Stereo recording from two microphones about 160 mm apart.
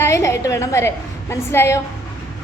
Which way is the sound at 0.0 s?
20° left (ahead or behind).